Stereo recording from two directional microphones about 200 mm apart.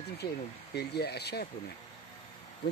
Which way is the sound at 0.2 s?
50° left (ahead or behind).